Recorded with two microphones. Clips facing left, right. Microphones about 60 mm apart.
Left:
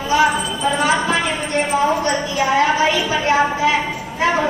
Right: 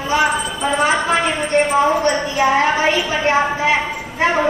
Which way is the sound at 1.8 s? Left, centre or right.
Right.